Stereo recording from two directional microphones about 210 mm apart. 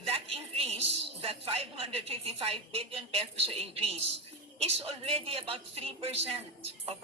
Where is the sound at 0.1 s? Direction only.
25° right (ahead or behind).